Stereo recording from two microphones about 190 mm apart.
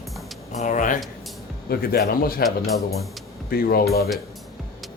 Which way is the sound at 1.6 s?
55° left (ahead or behind).